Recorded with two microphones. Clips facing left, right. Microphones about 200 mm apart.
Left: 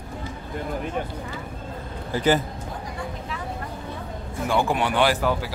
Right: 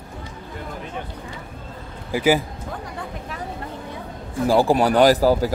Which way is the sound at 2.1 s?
10° right (ahead or behind).